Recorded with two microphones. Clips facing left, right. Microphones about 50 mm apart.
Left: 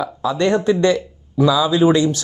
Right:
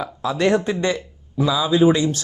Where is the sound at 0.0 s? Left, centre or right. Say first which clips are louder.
Left 2 dB; right.